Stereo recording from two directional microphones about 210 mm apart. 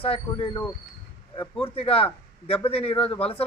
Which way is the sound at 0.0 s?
25° left (ahead or behind).